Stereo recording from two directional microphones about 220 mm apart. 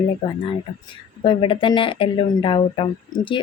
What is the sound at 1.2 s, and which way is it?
Speech, 20° left (ahead or behind).